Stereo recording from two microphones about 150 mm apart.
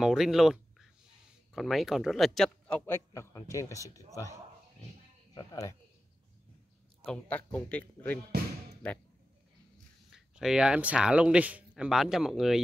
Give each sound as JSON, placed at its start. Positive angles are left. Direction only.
{"t": 0.0, "sound": "speech", "side_deg": -5}
{"t": 3.1, "sound": "speech", "side_deg": 20}
{"t": 5.3, "sound": "speech", "side_deg": 30}
{"t": 7.1, "sound": "speech", "side_deg": 10}
{"t": 10.1, "sound": "speech", "side_deg": -5}